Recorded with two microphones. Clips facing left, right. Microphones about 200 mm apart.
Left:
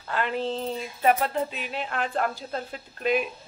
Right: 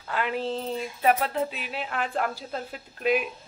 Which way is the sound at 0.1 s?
5° right (ahead or behind).